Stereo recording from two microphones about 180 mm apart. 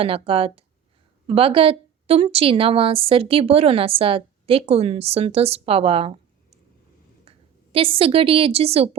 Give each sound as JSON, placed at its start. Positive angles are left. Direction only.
{"t": 0.0, "sound": "a woman's voice", "side_deg": -30}